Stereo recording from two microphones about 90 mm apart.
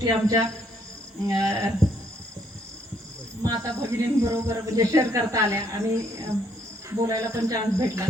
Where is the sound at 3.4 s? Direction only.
35° right (ahead or behind).